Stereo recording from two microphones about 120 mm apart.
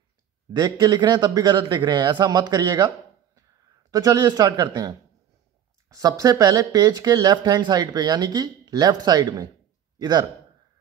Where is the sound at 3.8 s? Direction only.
30° right (ahead or behind).